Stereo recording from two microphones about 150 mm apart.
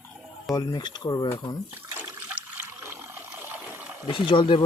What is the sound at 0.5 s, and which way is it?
Speech, 25° left (ahead or behind).